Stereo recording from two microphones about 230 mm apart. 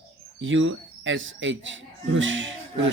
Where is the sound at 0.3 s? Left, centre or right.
Right.